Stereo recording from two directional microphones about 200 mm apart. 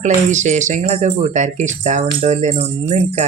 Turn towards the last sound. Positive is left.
turn(degrees=-35)  # may be behind; listen again after turning